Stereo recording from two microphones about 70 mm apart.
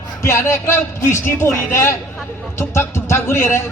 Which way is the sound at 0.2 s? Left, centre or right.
Left.